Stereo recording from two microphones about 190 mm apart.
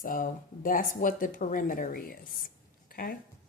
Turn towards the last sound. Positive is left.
turn(degrees=50)  # may be behind; listen again after turning